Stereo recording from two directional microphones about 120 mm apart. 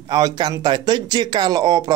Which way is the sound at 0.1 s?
35° right (ahead or behind).